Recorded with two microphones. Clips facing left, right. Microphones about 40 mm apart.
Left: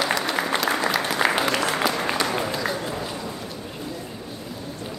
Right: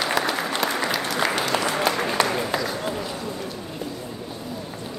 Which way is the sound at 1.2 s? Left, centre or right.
Centre.